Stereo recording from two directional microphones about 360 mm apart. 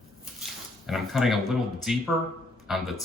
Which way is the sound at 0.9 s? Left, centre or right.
Centre.